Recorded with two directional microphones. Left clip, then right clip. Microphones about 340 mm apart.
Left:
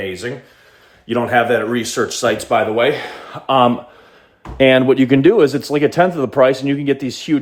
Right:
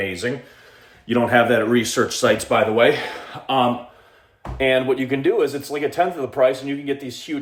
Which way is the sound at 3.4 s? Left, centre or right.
Left.